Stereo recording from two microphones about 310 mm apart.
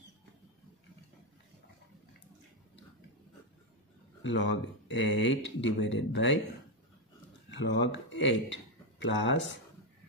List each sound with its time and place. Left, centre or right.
4.2 s speech: left
7.5 s speech: left